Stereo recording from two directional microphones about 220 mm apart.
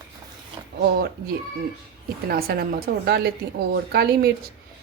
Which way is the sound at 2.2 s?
45° right (ahead or behind).